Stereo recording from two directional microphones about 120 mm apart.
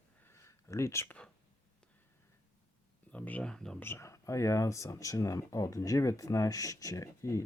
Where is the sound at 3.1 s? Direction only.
10° left (ahead or behind).